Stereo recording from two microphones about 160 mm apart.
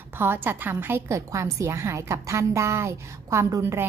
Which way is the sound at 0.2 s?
15° right (ahead or behind).